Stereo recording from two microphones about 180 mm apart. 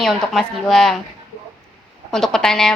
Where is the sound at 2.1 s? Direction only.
5° left (ahead or behind).